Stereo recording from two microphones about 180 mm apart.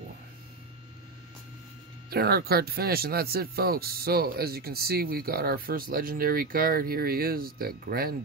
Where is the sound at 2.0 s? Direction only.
60° right (ahead or behind).